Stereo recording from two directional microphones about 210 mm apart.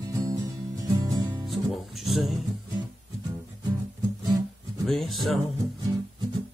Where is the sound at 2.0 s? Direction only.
Centre (ahead or behind).